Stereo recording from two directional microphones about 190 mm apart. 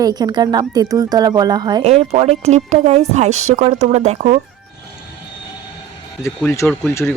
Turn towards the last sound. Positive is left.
turn(degrees=15)  # may be behind; listen again after turning